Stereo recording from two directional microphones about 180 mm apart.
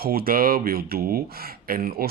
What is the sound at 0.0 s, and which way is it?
Speech, 55° right (ahead or behind).